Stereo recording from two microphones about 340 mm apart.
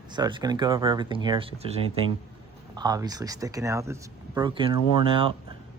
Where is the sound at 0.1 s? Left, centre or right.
Centre.